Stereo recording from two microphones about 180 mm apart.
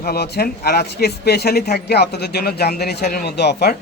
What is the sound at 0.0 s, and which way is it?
A man's voice, 60° left (ahead or behind).